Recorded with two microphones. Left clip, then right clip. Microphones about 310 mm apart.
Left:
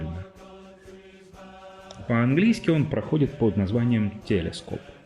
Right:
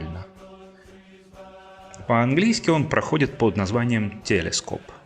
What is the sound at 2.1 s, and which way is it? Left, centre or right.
Speech, centre.